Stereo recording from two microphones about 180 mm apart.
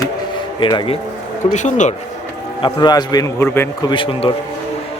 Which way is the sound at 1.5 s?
40° left (ahead or behind).